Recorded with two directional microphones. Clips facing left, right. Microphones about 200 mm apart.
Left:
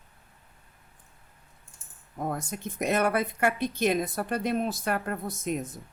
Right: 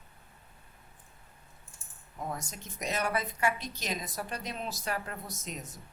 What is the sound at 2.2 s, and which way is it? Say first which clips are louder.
Speech: left 7 dB; 55° left (ahead or behind).